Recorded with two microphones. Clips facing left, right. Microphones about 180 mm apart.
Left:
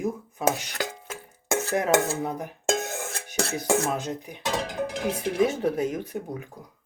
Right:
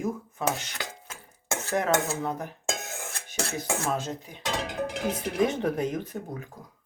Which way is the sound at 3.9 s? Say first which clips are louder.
Left 2 dB; 15° left (ahead or behind).